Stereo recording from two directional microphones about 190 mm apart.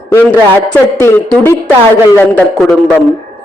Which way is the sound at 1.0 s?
10° left (ahead or behind).